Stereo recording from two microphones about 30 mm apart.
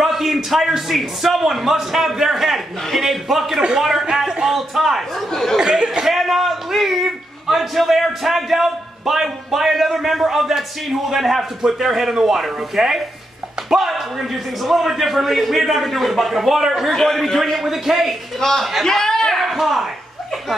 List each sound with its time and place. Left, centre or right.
0.0 s a man's voice: centre
5.6 s speech: right
6.0 s a man's voice: centre
16.9 s a man's voice: centre
17.6 s a man's voice: centre
18.9 s a sound: centre
19.5 s speech: centre